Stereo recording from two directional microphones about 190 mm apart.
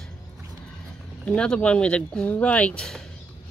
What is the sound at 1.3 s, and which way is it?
Speech, 5° left (ahead or behind).